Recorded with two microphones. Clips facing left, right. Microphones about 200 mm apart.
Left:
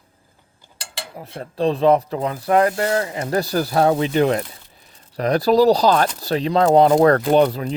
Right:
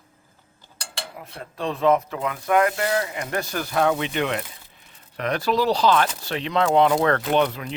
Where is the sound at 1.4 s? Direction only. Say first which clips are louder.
Left 5 dB; 35° left (ahead or behind).